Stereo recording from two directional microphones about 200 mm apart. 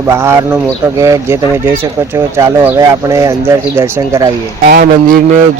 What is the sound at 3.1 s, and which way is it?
Speech, 15° right (ahead or behind).